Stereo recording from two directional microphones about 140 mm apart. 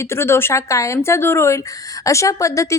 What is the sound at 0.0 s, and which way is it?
Speech, 20° left (ahead or behind).